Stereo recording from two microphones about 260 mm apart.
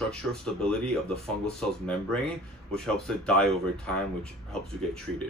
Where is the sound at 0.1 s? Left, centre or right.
Centre.